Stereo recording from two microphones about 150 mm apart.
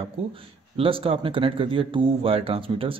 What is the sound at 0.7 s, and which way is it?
Speech, 35° right (ahead or behind).